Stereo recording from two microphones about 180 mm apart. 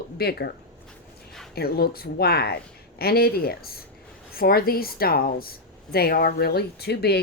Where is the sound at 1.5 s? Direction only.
60° left (ahead or behind).